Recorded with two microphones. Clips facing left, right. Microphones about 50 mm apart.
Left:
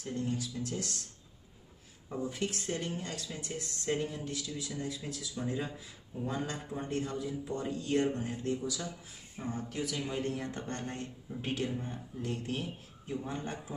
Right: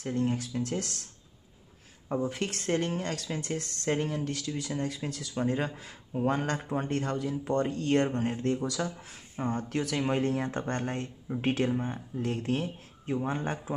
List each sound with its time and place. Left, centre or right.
0.0 s speech: right
2.2 s speech: right